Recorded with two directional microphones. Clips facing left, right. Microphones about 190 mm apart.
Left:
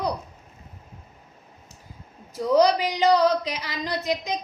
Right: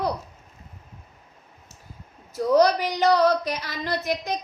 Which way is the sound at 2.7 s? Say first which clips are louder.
Even; 15° left (ahead or behind).